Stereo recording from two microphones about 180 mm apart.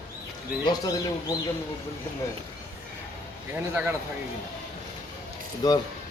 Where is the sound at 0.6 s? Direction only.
20° left (ahead or behind).